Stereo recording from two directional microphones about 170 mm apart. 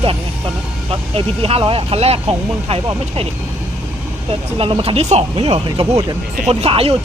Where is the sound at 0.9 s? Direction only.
35° right (ahead or behind).